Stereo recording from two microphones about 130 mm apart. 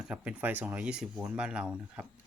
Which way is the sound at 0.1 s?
10° right (ahead or behind).